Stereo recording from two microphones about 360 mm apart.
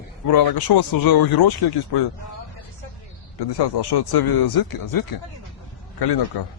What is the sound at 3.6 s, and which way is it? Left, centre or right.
Speech, left.